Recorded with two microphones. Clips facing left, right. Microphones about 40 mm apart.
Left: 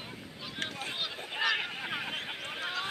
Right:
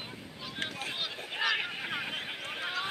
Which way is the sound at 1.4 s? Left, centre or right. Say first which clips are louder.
Even; centre.